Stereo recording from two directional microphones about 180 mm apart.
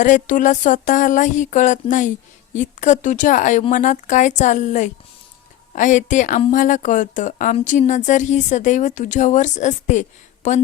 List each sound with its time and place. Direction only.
0.0 s a woman's voice: 45° left (ahead or behind)